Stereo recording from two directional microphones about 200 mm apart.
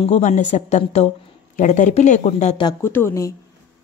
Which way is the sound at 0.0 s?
35° left (ahead or behind).